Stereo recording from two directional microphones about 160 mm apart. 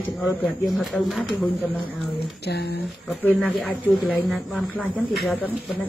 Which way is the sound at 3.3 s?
Centre (ahead or behind).